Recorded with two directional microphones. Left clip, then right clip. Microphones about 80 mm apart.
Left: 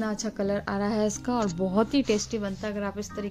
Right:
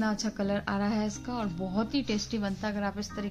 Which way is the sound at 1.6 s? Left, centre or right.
Left.